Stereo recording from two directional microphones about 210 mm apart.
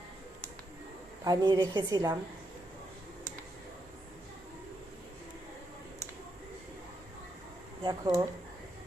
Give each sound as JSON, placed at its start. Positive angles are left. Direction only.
{"t": 1.2, "sound": "a woman's voice", "side_deg": -15}
{"t": 7.9, "sound": "speech", "side_deg": -20}